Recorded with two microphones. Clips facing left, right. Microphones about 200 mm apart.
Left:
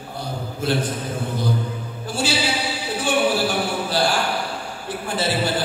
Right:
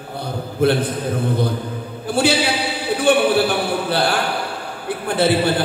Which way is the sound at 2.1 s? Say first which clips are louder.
Right 6 dB; 60° right (ahead or behind).